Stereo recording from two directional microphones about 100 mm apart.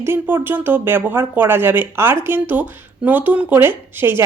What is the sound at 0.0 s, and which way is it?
A woman's voice, 25° right (ahead or behind).